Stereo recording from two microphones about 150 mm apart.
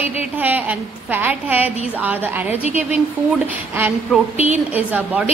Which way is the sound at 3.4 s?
15° right (ahead or behind).